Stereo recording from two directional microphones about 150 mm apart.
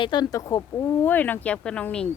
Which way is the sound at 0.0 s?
30° left (ahead or behind).